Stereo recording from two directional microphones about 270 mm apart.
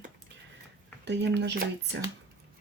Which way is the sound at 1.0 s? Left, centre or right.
Right.